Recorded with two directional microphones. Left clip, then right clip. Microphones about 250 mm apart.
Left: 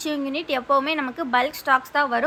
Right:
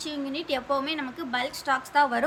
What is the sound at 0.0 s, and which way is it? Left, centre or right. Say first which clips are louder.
A woman's voice: left 6 dB; centre.